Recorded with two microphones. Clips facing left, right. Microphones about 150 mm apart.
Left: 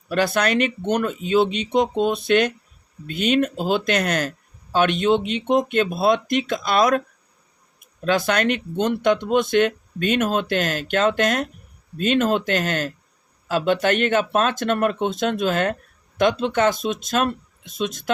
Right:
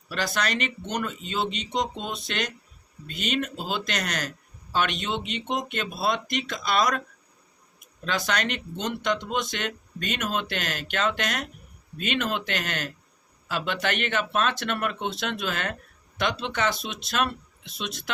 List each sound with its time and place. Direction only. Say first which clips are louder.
0.1 s speech: left 8 dB; 55° left (ahead or behind)
8.0 s speech: left 8 dB; 55° left (ahead or behind)